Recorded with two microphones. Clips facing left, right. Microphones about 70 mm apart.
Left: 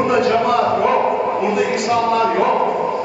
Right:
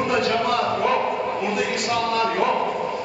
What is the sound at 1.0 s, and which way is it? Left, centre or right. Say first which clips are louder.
Dog: left 6 dB; left.